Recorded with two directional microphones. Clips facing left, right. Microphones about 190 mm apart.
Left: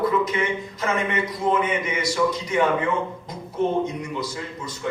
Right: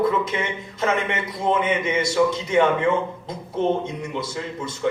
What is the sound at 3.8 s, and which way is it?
Speech, 25° right (ahead or behind).